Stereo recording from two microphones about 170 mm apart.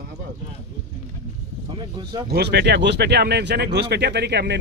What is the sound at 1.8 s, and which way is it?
Speech, 25° right (ahead or behind).